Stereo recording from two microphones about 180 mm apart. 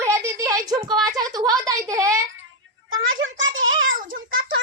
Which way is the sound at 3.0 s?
90° right.